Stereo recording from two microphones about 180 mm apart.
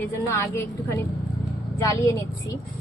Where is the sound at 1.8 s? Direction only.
15° left (ahead or behind).